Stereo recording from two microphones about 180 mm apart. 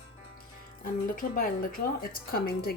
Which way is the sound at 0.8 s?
50° left (ahead or behind).